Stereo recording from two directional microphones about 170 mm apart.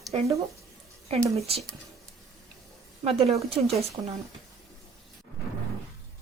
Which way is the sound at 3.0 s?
35° right (ahead or behind).